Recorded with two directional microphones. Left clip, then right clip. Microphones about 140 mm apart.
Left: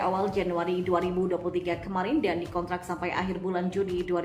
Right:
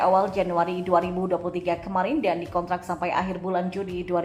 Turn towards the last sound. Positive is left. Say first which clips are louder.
# right 4 dB
turn(degrees=-20)  # may be behind; listen again after turning